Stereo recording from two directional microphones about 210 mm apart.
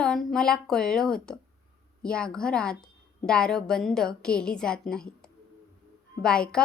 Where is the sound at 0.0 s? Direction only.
Centre (ahead or behind).